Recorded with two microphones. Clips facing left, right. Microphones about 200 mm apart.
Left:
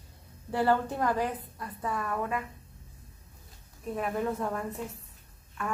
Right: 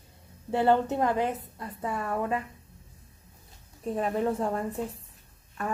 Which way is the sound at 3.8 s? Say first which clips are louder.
Right 3 dB; 30° right (ahead or behind).